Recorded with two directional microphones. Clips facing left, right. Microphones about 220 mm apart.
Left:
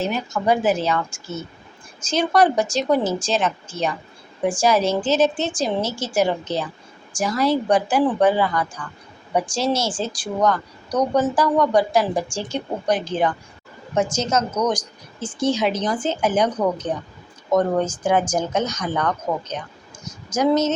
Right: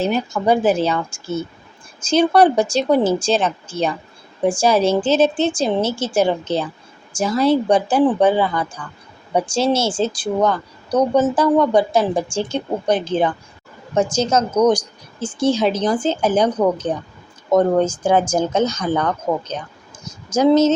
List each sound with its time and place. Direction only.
0.0 s speech: 30° right (ahead or behind)
2.0 s speech: 30° right (ahead or behind)